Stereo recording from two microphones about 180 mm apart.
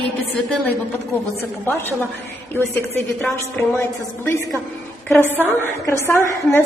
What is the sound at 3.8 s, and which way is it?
A woman's voice, 15° left (ahead or behind).